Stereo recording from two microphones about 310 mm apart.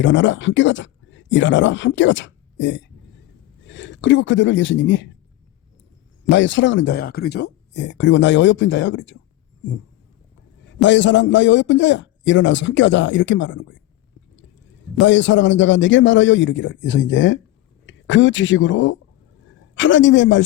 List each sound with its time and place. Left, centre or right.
0.0 s speech: left
6.3 s a man's voice: left
10.7 s a man's voice: left
14.9 s a man's voice: left